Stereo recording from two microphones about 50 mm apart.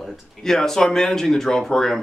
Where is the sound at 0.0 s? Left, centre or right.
Centre.